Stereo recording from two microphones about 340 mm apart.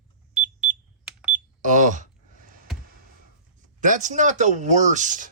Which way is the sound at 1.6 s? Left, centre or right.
Right.